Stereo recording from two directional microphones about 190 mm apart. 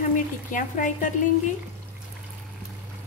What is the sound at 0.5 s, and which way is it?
Speech, 40° left (ahead or behind).